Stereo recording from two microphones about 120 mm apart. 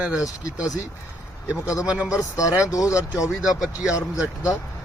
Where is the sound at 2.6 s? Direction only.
25° left (ahead or behind).